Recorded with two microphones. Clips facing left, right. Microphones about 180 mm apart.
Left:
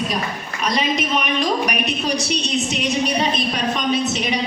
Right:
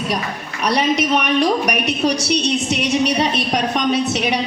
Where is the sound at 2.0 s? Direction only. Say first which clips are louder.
Right 8 dB; 70° right (ahead or behind).